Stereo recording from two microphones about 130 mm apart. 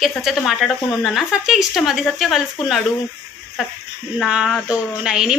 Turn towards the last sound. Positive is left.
turn(degrees=-5)  # may be behind; listen again after turning